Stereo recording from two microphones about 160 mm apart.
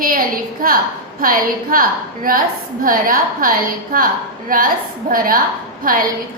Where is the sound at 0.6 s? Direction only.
65° right (ahead or behind).